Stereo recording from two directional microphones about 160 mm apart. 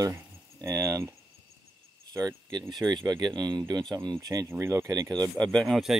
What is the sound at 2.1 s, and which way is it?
Speech, 20° right (ahead or behind).